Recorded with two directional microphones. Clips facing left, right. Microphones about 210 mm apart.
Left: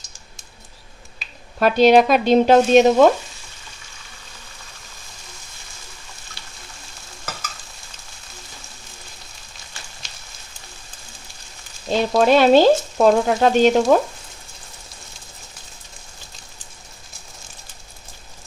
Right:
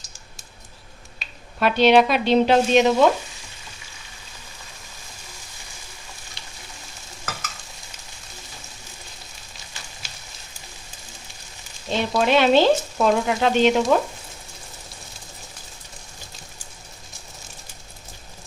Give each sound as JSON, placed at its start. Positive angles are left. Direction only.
{"t": 1.2, "sound": "finger snapping", "side_deg": 0}
{"t": 1.5, "sound": "speech", "side_deg": 40}
{"t": 11.9, "sound": "frying", "side_deg": 40}